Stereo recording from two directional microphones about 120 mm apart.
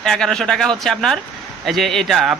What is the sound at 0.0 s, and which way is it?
A man's voice, 5° left (ahead or behind).